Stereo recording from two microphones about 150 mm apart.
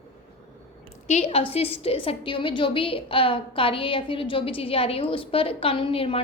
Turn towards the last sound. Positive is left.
turn(degrees=40)  # may be behind; listen again after turning